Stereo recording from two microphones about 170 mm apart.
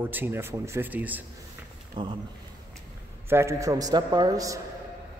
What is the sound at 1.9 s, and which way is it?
Speech, 25° right (ahead or behind).